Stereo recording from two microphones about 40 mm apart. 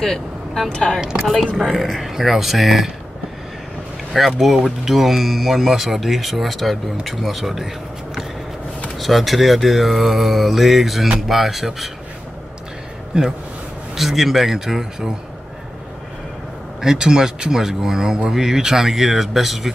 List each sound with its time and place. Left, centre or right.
0.0 s vehicle: centre
1.6 s speech: centre
4.4 s speech: centre
13.1 s a man's voice: centre
13.9 s speech: centre
16.8 s speech: centre